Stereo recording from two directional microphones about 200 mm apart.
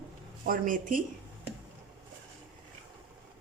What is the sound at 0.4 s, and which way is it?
Speech, 45° right (ahead or behind).